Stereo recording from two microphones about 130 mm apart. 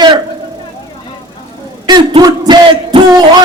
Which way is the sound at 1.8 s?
35° right (ahead or behind).